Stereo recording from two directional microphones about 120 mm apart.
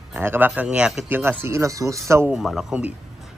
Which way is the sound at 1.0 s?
15° right (ahead or behind).